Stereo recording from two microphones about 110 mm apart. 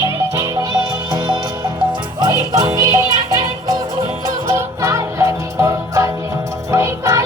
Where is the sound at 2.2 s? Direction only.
35° right (ahead or behind).